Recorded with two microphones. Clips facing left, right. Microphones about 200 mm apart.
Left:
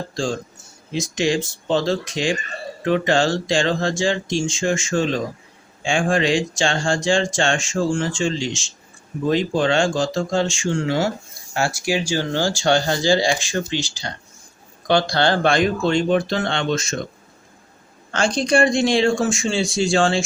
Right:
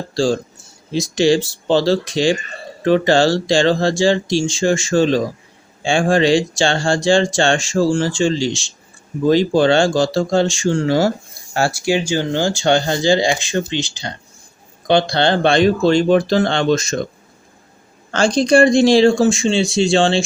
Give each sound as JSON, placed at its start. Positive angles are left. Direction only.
{"t": 0.9, "sound": "speech", "side_deg": -30}
{"t": 15.1, "sound": "speech", "side_deg": -20}
{"t": 18.1, "sound": "speech", "side_deg": -35}